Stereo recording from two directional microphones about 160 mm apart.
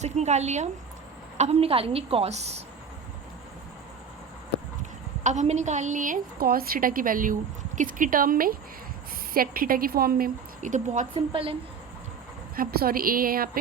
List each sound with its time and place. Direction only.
0.0 s a woman's voice: 45° right (ahead or behind)
4.8 s a woman's voice: 45° right (ahead or behind)
11.1 s a woman's voice: 35° right (ahead or behind)
12.5 s a woman's voice: 65° right (ahead or behind)